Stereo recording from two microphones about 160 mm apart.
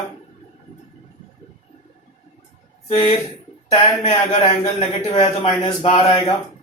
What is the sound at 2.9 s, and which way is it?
A man's voice, 40° left (ahead or behind).